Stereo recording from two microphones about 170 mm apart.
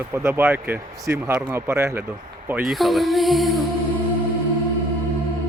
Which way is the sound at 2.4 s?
5° right (ahead or behind).